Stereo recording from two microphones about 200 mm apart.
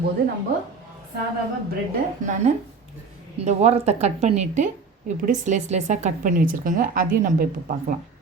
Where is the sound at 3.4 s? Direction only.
35° right (ahead or behind).